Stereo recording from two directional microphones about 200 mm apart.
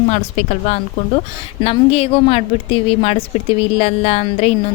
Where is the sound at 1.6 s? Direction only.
30° left (ahead or behind).